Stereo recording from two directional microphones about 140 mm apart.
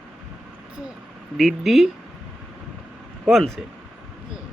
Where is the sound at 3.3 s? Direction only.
Centre (ahead or behind).